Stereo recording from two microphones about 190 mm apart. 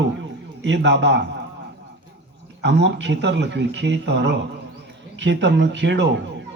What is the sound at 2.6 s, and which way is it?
A man's voice, 65° right (ahead or behind).